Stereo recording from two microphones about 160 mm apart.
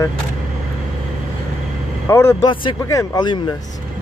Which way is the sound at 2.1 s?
15° left (ahead or behind).